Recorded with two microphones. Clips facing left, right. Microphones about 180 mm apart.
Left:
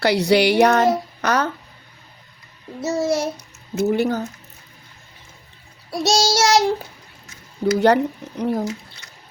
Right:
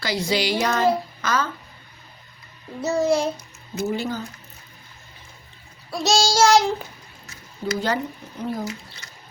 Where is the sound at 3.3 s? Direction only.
65° left (ahead or behind).